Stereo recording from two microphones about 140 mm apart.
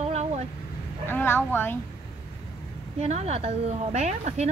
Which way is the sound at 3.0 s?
50° right (ahead or behind).